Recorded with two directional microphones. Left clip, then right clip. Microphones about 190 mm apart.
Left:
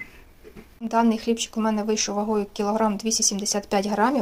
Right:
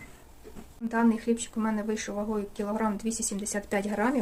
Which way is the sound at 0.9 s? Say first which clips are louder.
Left 5 dB; 25° left (ahead or behind).